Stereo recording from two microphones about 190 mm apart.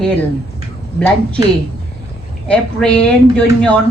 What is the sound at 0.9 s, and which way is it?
Speech, 5° left (ahead or behind).